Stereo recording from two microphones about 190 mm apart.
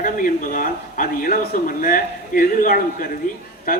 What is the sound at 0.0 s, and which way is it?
A man's voice, 45° left (ahead or behind).